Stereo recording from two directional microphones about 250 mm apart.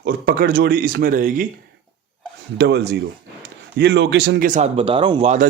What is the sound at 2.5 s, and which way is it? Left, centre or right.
Speech, right.